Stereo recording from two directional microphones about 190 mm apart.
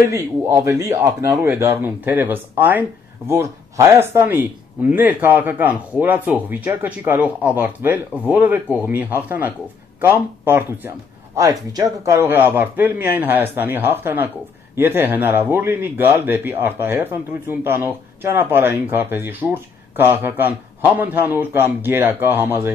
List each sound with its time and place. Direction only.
0.1 s speech: 15° right (ahead or behind)